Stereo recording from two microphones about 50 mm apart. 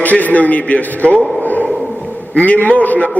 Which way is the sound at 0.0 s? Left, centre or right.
Left.